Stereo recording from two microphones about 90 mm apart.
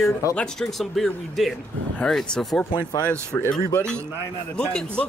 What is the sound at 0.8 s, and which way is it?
Speech, centre (ahead or behind).